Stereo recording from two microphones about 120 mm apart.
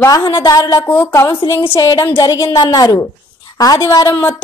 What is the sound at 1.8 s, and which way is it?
Speech, 35° left (ahead or behind).